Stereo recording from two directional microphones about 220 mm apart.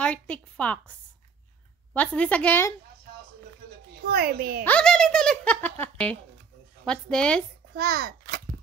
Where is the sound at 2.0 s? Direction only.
5° left (ahead or behind).